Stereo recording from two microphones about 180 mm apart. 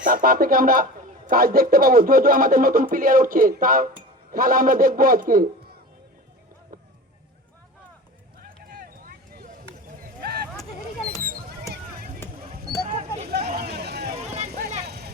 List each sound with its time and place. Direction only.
0.0 s a man's voice: 50° right (ahead or behind)
8.4 s vehicle: 50° right (ahead or behind)
10.2 s a sound: 60° right (ahead or behind)
11.2 s rodents: 55° right (ahead or behind)
12.9 s a sound: 40° right (ahead or behind)
13.6 s hubbub: 60° right (ahead or behind)
14.2 s vehicle: 35° right (ahead or behind)
14.8 s vehicle: 65° right (ahead or behind)